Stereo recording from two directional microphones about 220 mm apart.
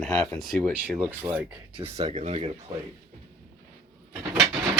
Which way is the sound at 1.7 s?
25° right (ahead or behind).